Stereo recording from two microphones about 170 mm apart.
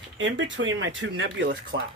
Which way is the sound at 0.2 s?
90° right.